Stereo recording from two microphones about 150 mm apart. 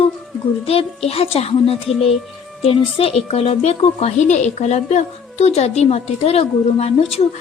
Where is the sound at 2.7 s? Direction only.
40° left (ahead or behind).